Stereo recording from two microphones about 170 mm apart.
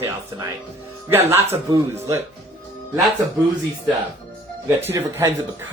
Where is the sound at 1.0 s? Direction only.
15° right (ahead or behind).